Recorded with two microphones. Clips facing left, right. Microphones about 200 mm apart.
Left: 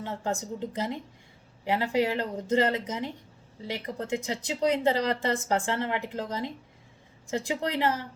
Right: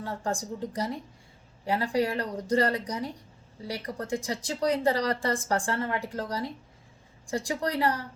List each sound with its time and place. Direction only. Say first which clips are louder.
0.0 s speech: even; 20° left (ahead or behind)